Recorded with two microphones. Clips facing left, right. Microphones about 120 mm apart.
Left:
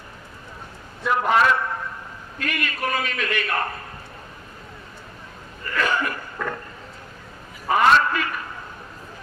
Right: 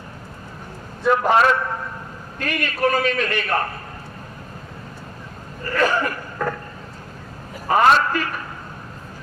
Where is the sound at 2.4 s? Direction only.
35° right (ahead or behind).